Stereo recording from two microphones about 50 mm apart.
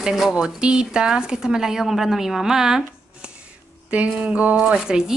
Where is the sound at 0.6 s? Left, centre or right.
Centre.